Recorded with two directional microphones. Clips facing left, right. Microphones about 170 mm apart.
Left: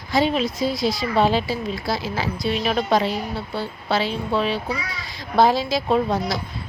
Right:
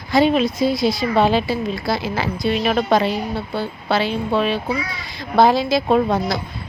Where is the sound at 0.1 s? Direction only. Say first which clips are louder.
Right 5 dB; 60° right (ahead or behind).